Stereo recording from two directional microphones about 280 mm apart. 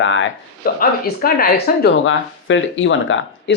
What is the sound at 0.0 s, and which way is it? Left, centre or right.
Speech, left.